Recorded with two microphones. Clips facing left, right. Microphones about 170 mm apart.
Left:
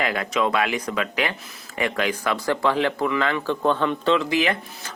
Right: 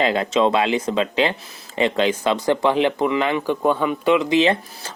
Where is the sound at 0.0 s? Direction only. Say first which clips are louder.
Right 5 dB; 25° right (ahead or behind).